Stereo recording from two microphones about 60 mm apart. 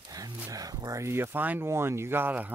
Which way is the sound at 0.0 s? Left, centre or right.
Right.